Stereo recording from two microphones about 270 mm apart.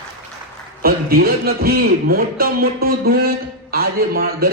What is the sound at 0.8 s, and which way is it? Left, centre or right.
A man's voice, right.